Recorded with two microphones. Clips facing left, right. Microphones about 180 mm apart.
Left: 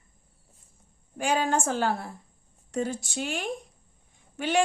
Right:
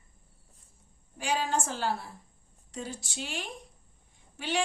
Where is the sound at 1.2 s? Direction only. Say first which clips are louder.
Left 4 dB; 50° left (ahead or behind).